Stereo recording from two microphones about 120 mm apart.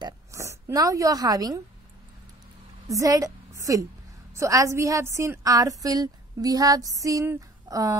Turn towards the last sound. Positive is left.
turn(degrees=-30)  # may be behind; listen again after turning